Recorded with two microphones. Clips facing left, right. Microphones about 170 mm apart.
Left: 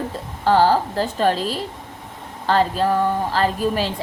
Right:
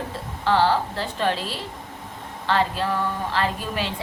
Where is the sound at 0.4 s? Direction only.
40° left (ahead or behind).